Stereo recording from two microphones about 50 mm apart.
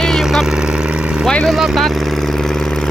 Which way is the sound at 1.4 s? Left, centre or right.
Centre.